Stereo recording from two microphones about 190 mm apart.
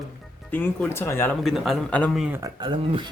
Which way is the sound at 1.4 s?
Centre (ahead or behind).